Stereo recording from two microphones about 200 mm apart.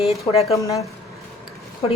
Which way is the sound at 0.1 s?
30° left (ahead or behind).